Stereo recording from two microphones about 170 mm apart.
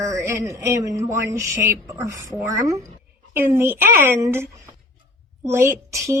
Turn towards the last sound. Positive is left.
turn(degrees=-15)  # may be behind; listen again after turning